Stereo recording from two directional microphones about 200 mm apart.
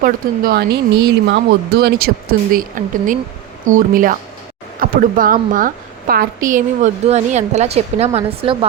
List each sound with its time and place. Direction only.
0.0 s a woman's voice: 50° right (ahead or behind); by 8.5 s 30° right (ahead or behind)